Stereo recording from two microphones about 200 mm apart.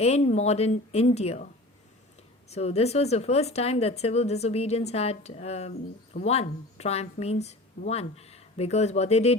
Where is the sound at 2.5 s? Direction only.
30° left (ahead or behind).